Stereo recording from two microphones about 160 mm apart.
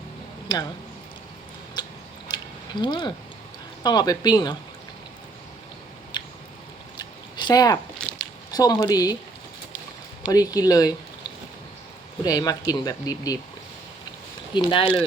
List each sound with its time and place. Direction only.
0.5 s speech: 25° left (ahead or behind)
1.8 s a sound: 25° left (ahead or behind)
2.8 s speech: 30° left (ahead or behind)
6.1 s chewing: 30° left (ahead or behind)
6.9 s a sound: 25° left (ahead or behind)
7.9 s a sound: 5° left (ahead or behind)
8.5 s speech: 25° left (ahead or behind)
10.2 s speech: 20° left (ahead or behind)
12.2 s speech: 25° left (ahead or behind)
14.5 s speech: 30° left (ahead or behind)